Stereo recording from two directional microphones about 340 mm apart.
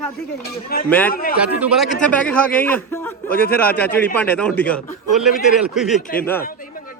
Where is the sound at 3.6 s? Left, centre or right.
Centre.